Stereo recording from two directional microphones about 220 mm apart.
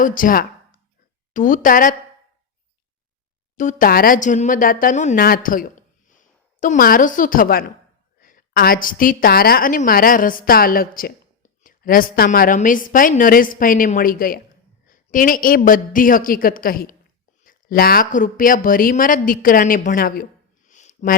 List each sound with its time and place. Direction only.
0.0 s a woman's voice: 40° left (ahead or behind)
3.6 s a woman's voice: 35° left (ahead or behind)
20.7 s a sound: 35° left (ahead or behind)